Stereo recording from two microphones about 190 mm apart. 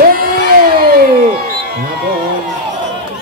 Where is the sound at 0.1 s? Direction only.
50° right (ahead or behind).